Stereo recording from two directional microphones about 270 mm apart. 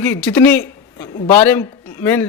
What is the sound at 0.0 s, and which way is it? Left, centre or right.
A man's voice, centre.